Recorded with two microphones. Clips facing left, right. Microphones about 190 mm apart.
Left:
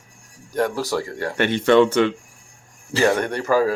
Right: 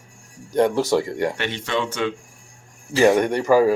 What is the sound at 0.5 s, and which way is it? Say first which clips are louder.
Speech: right 4 dB; 20° right (ahead or behind).